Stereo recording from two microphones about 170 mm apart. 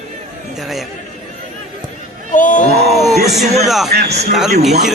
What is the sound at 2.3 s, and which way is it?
Speech, 50° left (ahead or behind).